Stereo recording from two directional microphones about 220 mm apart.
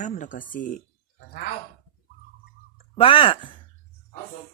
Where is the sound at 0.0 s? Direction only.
35° left (ahead or behind).